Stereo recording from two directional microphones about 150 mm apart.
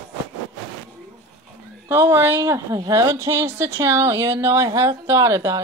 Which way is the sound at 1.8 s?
15° right (ahead or behind).